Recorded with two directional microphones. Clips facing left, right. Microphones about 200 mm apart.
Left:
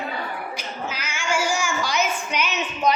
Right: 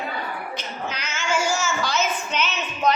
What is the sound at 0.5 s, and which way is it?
Child singing, 10° left (ahead or behind).